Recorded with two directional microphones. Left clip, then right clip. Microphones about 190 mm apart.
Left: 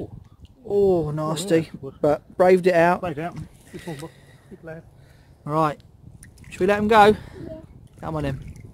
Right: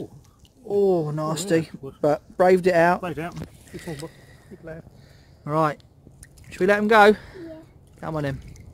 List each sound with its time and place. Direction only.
0.7 s speech: centre (ahead or behind)
3.0 s speech: 20° left (ahead or behind)
5.4 s speech: centre (ahead or behind)